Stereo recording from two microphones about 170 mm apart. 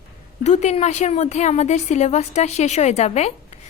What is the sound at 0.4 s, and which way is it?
A woman's voice, 40° left (ahead or behind).